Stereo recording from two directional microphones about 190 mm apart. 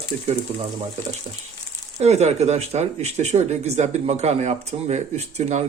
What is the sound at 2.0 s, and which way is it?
Speech, 35° right (ahead or behind).